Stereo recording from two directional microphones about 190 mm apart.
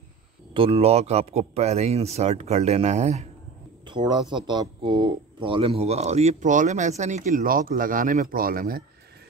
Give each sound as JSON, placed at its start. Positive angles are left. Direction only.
{"t": 0.6, "sound": "a man's voice", "side_deg": -30}
{"t": 3.8, "sound": "a man's voice", "side_deg": -25}